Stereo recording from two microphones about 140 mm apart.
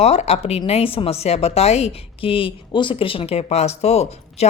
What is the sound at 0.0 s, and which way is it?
A woman's voice, 50° left (ahead or behind).